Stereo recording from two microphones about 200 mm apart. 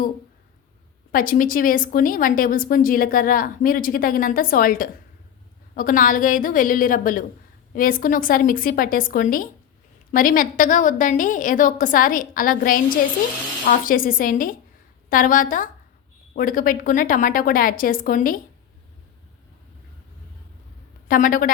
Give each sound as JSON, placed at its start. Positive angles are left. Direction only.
{"t": 1.1, "sound": "a woman's voice", "side_deg": 45}
{"t": 21.1, "sound": "a woman's voice", "side_deg": 45}